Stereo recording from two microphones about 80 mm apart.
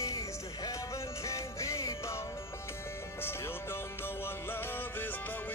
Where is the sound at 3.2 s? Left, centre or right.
Left.